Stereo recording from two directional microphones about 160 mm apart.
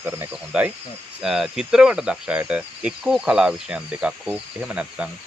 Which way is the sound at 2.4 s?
5° right (ahead or behind).